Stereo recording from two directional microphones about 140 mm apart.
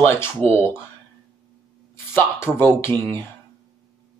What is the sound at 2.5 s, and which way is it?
Speech, 15° left (ahead or behind).